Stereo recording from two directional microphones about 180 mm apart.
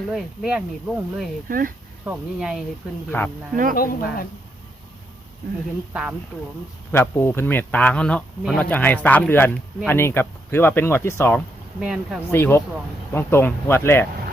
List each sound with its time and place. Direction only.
0.1 s speech: 5° right (ahead or behind)
1.5 s speech: 50° right (ahead or behind)
2.0 s speech: 5° right (ahead or behind)
3.1 s speech: 10° left (ahead or behind)
3.5 s speech: 50° right (ahead or behind)
3.8 s speech: 55° left (ahead or behind)
5.9 s speech: 5° right (ahead or behind)
6.9 s speech: 10° left (ahead or behind)
11.8 s speech: 5° right (ahead or behind)
12.3 s speech: 15° left (ahead or behind)